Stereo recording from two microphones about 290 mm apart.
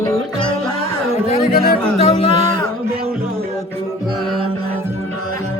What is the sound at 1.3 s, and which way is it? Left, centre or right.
Music, left.